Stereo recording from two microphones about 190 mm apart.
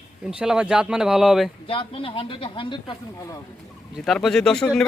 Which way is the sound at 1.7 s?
30° left (ahead or behind).